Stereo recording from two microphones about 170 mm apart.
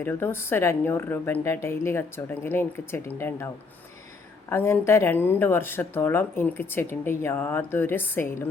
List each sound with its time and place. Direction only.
0.0 s speech: 15° left (ahead or behind)